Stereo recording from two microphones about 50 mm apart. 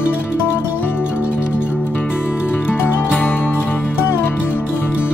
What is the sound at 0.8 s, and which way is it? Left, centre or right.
Music, left.